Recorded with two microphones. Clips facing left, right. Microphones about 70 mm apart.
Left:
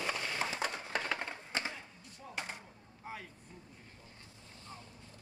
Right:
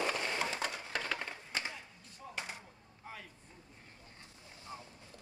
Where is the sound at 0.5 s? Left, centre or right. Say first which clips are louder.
Left 1 dB; left.